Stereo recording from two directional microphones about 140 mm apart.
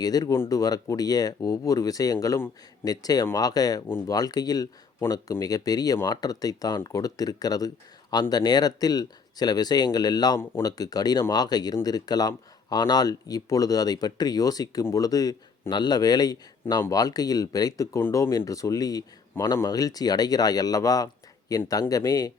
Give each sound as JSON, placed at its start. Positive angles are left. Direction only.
{"t": 0.0, "sound": "speech", "side_deg": 25}
{"t": 3.8, "sound": "speech", "side_deg": 15}
{"t": 4.1, "sound": "speech", "side_deg": 30}